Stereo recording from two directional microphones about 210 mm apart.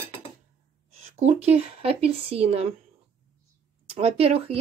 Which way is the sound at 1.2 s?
30° right (ahead or behind).